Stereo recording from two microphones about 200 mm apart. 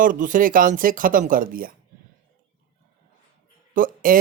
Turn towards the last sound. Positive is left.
turn(degrees=-45)  # may be behind; listen again after turning